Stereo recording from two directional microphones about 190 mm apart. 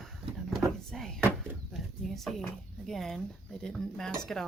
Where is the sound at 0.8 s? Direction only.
5° left (ahead or behind).